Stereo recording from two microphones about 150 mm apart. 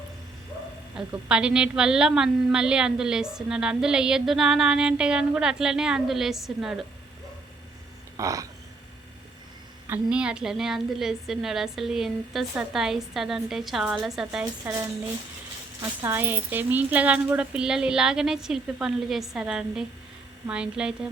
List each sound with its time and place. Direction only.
0.9 s a woman's voice: 5° right (ahead or behind)
8.1 s a sound: 20° right (ahead or behind)
9.8 s a woman's voice: 10° right (ahead or behind)
14.6 s a woman's voice: 15° right (ahead or behind)
16.0 s a woman's voice: 15° right (ahead or behind)